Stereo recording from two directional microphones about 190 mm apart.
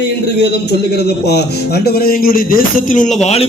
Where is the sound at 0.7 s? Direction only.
60° left (ahead or behind); by 3.1 s 45° left (ahead or behind).